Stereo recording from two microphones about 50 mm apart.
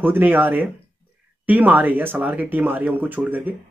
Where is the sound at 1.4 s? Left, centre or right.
Right.